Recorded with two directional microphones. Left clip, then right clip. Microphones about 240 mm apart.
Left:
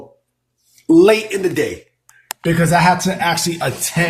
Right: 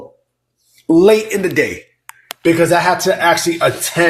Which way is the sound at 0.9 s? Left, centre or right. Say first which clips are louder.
Right 1 dB; centre.